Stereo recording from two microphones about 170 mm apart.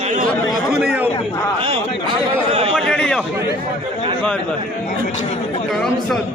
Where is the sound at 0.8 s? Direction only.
5° right (ahead or behind).